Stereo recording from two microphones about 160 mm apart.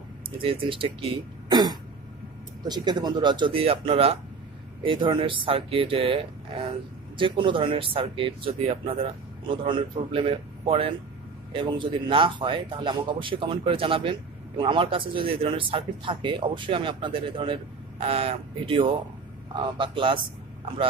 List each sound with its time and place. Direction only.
0.4 s a man's voice: 35° right (ahead or behind)